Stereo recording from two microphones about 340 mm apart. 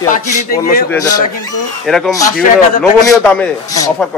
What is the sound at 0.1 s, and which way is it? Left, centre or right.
Speech, left.